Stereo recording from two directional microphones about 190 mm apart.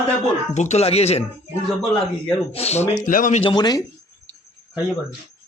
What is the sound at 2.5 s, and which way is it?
Speech, 35° left (ahead or behind).